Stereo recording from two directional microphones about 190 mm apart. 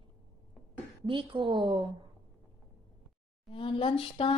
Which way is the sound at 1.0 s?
25° right (ahead or behind).